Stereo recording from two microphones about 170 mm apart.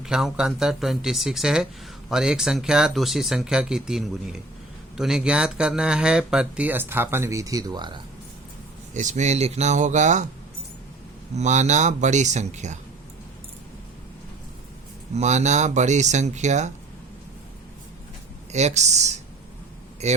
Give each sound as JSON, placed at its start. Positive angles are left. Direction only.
{"t": 0.0, "sound": "speech", "side_deg": 0}
{"t": 8.9, "sound": "speech", "side_deg": -45}
{"t": 11.3, "sound": "speech", "side_deg": -45}
{"t": 15.1, "sound": "speech", "side_deg": -45}
{"t": 18.5, "sound": "speech", "side_deg": -40}